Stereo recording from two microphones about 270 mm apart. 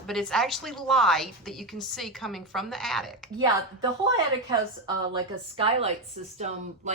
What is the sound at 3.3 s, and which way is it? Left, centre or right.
Speech, centre.